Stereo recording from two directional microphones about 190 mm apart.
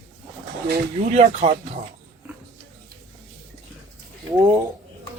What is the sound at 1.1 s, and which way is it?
Speech, 35° right (ahead or behind).